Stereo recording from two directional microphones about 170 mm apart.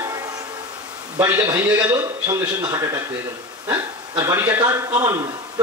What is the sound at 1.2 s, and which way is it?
A man's voice, 15° right (ahead or behind).